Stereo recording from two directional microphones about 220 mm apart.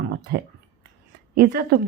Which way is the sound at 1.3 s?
45° right (ahead or behind).